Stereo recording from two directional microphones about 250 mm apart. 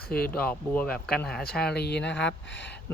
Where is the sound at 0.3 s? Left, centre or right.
Centre.